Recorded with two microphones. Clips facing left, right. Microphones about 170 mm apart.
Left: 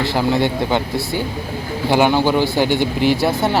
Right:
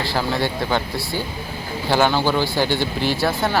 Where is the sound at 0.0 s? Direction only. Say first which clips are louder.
Left 5 dB; 20° left (ahead or behind).